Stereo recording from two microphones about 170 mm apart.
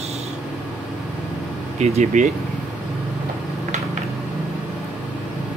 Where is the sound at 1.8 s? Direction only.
45° right (ahead or behind).